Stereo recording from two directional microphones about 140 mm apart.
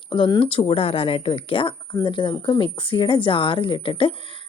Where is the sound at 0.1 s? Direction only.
35° left (ahead or behind).